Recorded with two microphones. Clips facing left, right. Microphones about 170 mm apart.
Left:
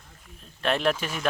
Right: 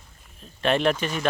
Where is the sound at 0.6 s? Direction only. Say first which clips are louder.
Right 3 dB; centre (ahead or behind).